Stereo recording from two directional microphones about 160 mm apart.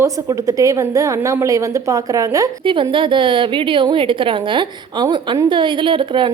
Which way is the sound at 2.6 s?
30° right (ahead or behind).